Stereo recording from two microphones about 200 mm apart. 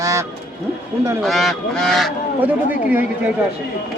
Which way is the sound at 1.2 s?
Centre (ahead or behind).